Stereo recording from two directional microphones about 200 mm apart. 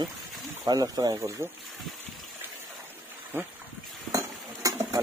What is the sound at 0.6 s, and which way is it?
Speech, 20° right (ahead or behind).